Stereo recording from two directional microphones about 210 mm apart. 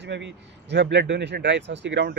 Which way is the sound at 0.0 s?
55° right (ahead or behind).